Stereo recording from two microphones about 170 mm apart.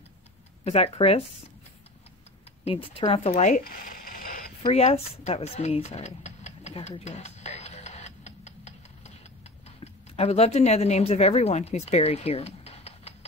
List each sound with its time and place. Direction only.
0.7 s speech: 35° left (ahead or behind)
2.6 s speech: 35° left (ahead or behind); by 4.5 s 55° left (ahead or behind)
4.6 s a sound: 35° left (ahead or behind)
9.7 s speech: 35° left (ahead or behind)